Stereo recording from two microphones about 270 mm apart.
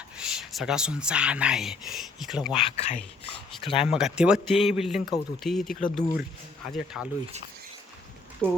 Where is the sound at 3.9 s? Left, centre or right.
Centre.